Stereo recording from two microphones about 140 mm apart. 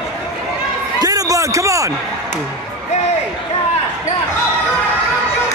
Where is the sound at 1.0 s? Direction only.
25° right (ahead or behind).